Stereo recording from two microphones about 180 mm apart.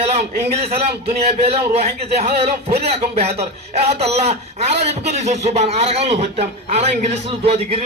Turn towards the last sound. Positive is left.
turn(degrees=-35)  # may be behind; listen again after turning